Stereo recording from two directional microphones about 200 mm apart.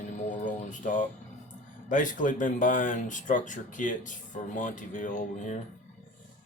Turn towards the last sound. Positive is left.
turn(degrees=35)  # may be behind; listen again after turning